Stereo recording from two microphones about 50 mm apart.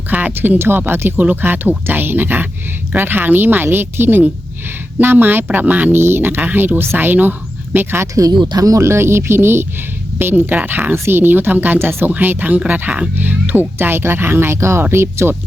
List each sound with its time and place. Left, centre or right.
0.1 s speech: right
0.3 s speech: right
1.1 s speech: right
5.9 s speech: right
8.2 s speech: right
8.7 s speech: right
10.9 s speech: right
12.1 s speech: right